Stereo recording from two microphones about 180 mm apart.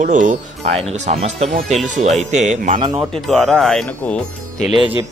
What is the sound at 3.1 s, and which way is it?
Speech, centre (ahead or behind).